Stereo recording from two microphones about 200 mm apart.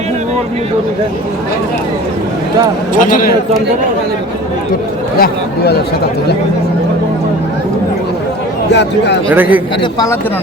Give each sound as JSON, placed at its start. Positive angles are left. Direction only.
{"t": 2.9, "sound": "speech", "side_deg": 40}
{"t": 5.2, "sound": "speech", "side_deg": 55}
{"t": 8.7, "sound": "speech", "side_deg": 60}
{"t": 9.3, "sound": "a man's voice", "side_deg": -10}
{"t": 9.8, "sound": "speech", "side_deg": 20}